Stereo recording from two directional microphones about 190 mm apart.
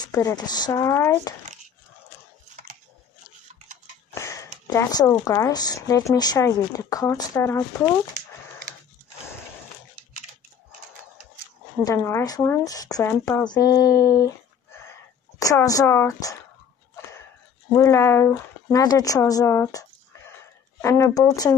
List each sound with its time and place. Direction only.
0.0 s speech: 15° left (ahead or behind)
4.1 s speech: 15° left (ahead or behind)
11.8 s speech: 15° left (ahead or behind)
17.7 s speech: 15° left (ahead or behind)